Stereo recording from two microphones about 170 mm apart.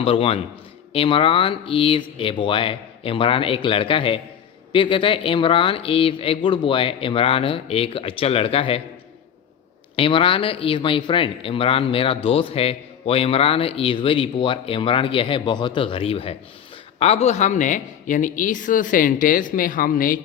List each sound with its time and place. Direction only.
0.0 s speech: 35° left (ahead or behind)
9.9 s a woman's voice: 30° left (ahead or behind); by 20.1 s 55° left (ahead or behind)